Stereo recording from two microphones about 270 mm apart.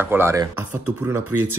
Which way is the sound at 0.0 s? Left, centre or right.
Centre.